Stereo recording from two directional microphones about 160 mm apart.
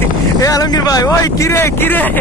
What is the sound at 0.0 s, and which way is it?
Speech, 20° left (ahead or behind).